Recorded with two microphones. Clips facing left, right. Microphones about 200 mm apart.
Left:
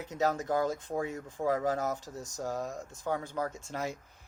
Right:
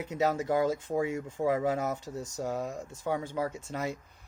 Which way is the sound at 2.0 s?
25° right (ahead or behind).